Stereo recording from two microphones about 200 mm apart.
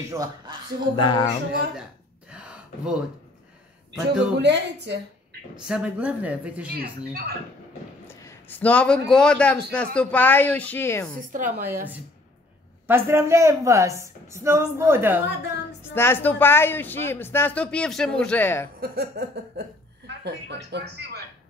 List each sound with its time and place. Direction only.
0.1 s speech: 20° right (ahead or behind)
0.9 s speech: 20° left (ahead or behind)
2.3 s a sound: 5° right (ahead or behind)
3.9 s speech: 5° right (ahead or behind)
4.4 s speech: 60° right (ahead or behind)
5.7 s a woman's voice: 5° right (ahead or behind)
6.7 s a sound: 50° right (ahead or behind)
8.1 s a man's voice: 10° left (ahead or behind)
11.1 s a woman's voice: 40° right (ahead or behind)
12.8 s a woman's voice: 10° right (ahead or behind)
15.8 s speech: 10° left (ahead or behind)
18.8 s a sound: 55° right (ahead or behind)
20.2 s speech: 60° right (ahead or behind)